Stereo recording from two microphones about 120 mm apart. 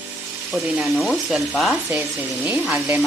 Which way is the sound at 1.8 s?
15° right (ahead or behind).